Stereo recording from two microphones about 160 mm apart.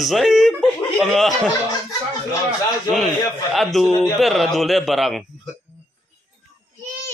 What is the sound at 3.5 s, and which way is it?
Speech, centre (ahead or behind).